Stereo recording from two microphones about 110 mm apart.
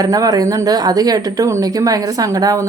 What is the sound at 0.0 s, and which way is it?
A woman's voice, 35° right (ahead or behind).